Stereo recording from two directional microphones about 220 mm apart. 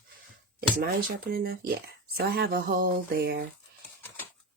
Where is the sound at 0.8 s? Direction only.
45° right (ahead or behind).